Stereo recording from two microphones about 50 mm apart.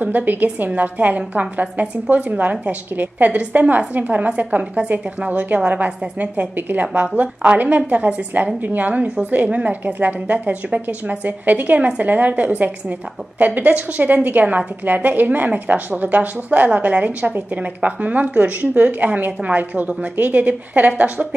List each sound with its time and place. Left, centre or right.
0.0 s a woman's voice: right